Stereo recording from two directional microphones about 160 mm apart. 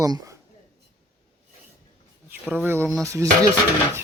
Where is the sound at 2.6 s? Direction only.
15° right (ahead or behind).